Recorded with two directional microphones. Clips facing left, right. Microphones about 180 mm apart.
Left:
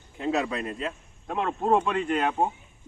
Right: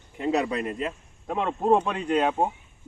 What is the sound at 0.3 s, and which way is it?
Speech, 20° right (ahead or behind).